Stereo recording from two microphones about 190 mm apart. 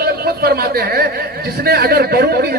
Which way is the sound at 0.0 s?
55° right (ahead or behind).